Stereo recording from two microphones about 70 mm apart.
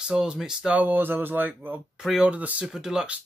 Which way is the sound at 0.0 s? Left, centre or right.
Centre.